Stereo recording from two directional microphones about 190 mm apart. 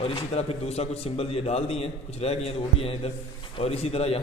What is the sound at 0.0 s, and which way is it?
A man's voice, 30° left (ahead or behind).